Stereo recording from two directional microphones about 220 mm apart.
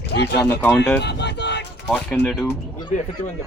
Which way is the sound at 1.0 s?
50° left (ahead or behind).